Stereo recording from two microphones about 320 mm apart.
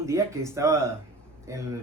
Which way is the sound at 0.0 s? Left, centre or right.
Centre.